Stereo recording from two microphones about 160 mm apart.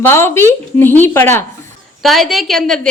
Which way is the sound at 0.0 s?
15° left (ahead or behind).